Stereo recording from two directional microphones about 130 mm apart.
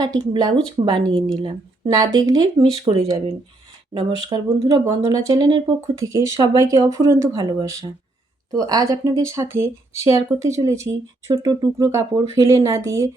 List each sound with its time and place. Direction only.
0.0 s speech: 35° right (ahead or behind)